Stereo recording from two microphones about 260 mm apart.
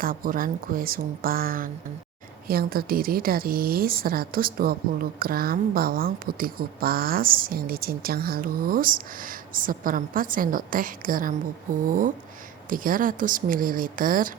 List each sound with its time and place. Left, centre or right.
0.0 s speech: right